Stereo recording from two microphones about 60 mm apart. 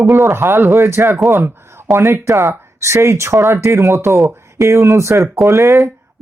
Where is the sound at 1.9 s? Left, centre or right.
Right.